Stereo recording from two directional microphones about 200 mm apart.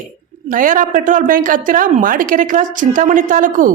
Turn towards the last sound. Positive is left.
turn(degrees=-40)  # may be behind; listen again after turning